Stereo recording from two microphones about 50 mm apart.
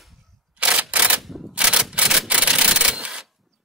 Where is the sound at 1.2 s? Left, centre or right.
Centre.